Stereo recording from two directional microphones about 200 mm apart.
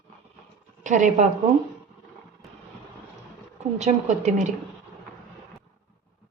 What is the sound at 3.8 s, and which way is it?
Speech, 35° right (ahead or behind).